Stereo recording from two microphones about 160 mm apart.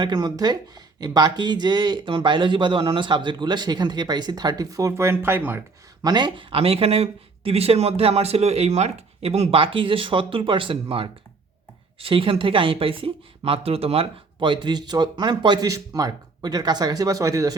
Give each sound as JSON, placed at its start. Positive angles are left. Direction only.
{"t": 0.0, "sound": "speech", "side_deg": -25}
{"t": 6.0, "sound": "speech", "side_deg": -25}